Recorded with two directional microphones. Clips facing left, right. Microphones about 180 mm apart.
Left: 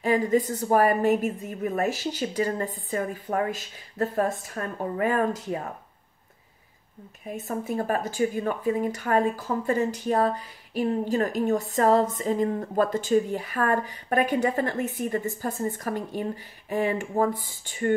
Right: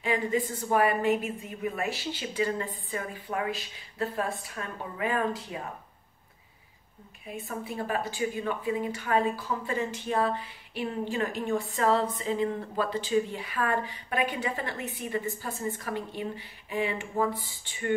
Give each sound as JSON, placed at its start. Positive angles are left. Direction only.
{"t": 0.0, "sound": "speech", "side_deg": 40}
{"t": 7.2, "sound": "speech", "side_deg": 45}